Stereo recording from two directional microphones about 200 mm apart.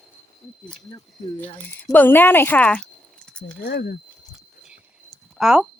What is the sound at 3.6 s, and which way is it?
Speech, 50° left (ahead or behind).